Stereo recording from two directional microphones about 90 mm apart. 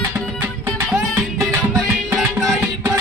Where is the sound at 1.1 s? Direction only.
30° right (ahead or behind).